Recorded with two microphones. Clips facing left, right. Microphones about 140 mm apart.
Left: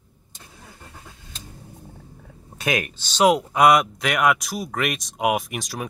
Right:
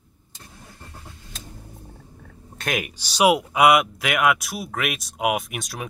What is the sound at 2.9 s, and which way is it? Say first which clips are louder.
Speech: even; 10° right (ahead or behind).